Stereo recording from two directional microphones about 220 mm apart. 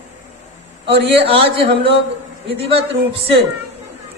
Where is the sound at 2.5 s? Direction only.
25° right (ahead or behind).